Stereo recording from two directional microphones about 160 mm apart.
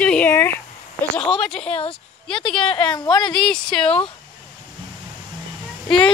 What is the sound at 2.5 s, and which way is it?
Speech, 35° left (ahead or behind).